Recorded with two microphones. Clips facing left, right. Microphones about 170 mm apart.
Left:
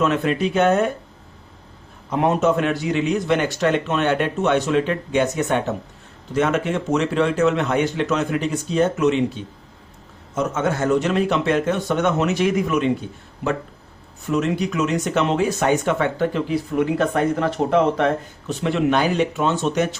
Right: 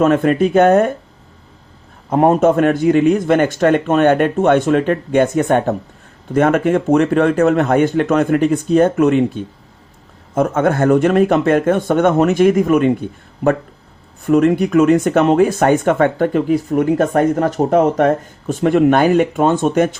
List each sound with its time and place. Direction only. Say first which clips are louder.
0.0 s speech: right 7 dB; 50° right (ahead or behind)
2.0 s speech: right 6 dB; 50° right (ahead or behind)